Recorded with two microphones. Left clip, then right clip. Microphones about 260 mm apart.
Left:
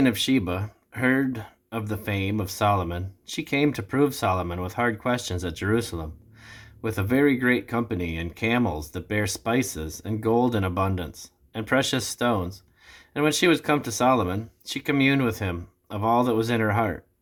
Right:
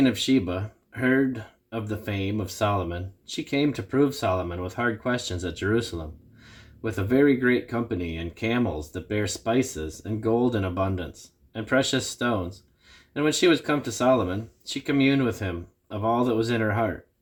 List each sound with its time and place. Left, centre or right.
0.0 s speech: left